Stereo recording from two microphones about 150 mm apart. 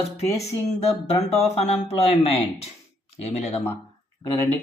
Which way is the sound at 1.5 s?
45° left (ahead or behind).